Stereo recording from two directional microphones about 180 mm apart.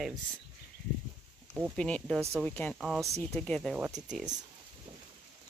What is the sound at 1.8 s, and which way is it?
Speech, 5° left (ahead or behind).